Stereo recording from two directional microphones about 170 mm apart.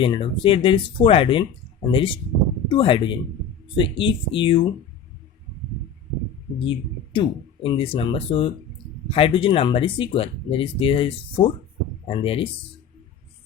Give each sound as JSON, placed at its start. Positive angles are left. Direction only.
{"t": 0.0, "sound": "speech", "side_deg": 30}
{"t": 6.7, "sound": "speech", "side_deg": 30}